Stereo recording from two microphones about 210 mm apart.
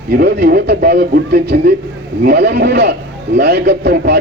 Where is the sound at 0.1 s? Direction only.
50° right (ahead or behind).